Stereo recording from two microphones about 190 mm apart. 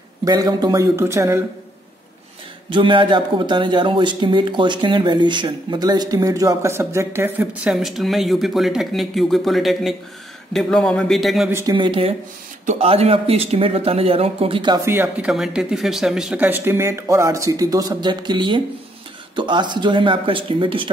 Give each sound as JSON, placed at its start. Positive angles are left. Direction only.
{"t": 0.2, "sound": "speech", "side_deg": -20}
{"t": 2.7, "sound": "a man's voice", "side_deg": -25}
{"t": 11.5, "sound": "speech", "side_deg": -20}
{"t": 14.9, "sound": "speech", "side_deg": -10}